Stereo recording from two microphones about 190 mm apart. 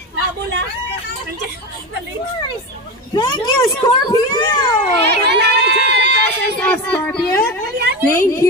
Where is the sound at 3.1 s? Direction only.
25° left (ahead or behind).